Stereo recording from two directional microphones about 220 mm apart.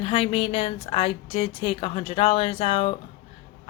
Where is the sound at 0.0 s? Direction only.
25° left (ahead or behind).